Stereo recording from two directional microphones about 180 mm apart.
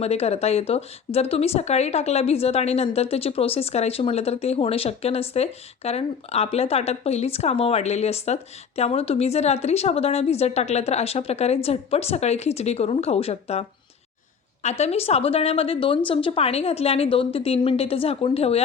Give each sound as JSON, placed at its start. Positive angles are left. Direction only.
{"t": 0.0, "sound": "speech", "side_deg": 35}